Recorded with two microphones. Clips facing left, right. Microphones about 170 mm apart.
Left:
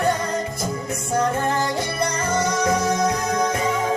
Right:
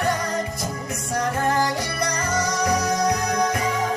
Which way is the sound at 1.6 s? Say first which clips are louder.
Left 1 dB; 25° left (ahead or behind).